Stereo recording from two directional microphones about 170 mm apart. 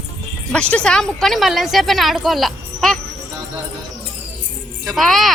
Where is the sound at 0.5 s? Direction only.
5° left (ahead or behind).